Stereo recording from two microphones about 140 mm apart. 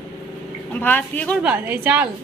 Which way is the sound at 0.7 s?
15° left (ahead or behind).